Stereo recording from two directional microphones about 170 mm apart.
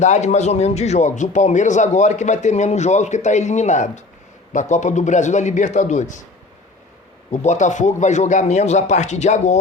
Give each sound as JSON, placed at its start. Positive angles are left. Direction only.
{"t": 0.0, "sound": "a man's voice", "side_deg": 45}
{"t": 7.3, "sound": "a man's voice", "side_deg": 45}